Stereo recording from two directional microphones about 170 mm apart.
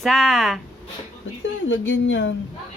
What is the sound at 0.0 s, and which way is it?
Speech, centre (ahead or behind).